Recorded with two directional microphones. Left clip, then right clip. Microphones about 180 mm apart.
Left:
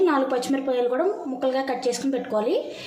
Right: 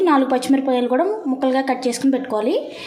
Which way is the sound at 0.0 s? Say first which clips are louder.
Right 5 dB; 60° right (ahead or behind).